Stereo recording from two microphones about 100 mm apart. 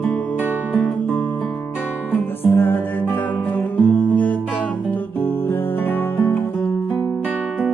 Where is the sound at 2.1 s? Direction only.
20° left (ahead or behind).